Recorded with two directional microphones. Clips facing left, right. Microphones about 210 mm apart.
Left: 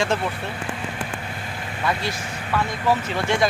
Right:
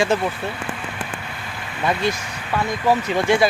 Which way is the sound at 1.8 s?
20° right (ahead or behind).